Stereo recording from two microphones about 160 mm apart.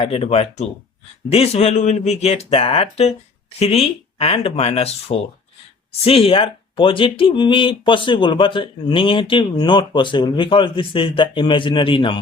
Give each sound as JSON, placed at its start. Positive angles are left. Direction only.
{"t": 0.0, "sound": "speech", "side_deg": 40}